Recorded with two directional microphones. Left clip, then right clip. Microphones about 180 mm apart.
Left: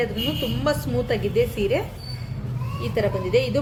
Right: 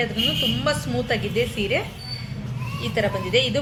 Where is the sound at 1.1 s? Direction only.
35° left (ahead or behind).